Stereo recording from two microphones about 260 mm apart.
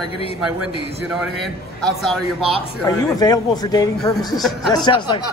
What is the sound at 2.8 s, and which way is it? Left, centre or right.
Speech, centre.